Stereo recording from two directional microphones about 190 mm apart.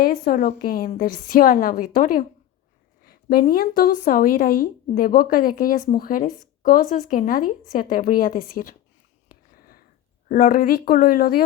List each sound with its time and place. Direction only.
0.0 s speech: 45° left (ahead or behind)
9.6 s a sound: 50° left (ahead or behind)
10.2 s speech: 50° left (ahead or behind)